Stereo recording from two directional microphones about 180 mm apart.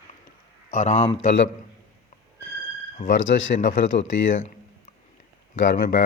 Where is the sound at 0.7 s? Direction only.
45° left (ahead or behind).